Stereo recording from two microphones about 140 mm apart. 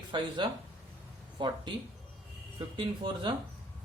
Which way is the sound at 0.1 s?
35° right (ahead or behind).